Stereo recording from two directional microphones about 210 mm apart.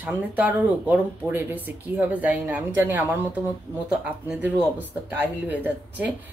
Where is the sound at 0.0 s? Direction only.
10° right (ahead or behind).